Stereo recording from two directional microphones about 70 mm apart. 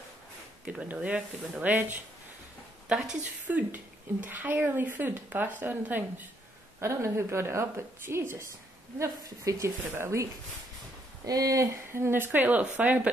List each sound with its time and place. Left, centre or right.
0.7 s speech: centre
3.4 s speech: right
6.8 s a woman's voice: right
11.2 s speech: right
11.7 s speech: right